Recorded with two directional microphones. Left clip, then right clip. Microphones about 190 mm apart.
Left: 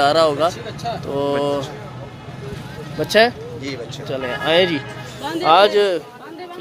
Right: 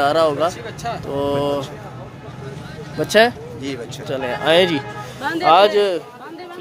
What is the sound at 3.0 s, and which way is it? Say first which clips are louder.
Speech: even; 15° right (ahead or behind).